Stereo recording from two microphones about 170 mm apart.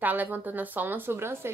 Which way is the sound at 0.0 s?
10° right (ahead or behind).